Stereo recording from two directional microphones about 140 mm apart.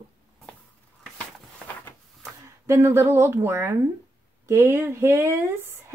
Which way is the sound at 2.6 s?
20° right (ahead or behind).